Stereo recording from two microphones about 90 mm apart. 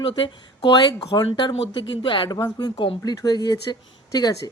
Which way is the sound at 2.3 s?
40° left (ahead or behind).